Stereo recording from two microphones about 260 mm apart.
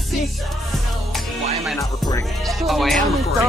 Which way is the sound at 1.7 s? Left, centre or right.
Centre.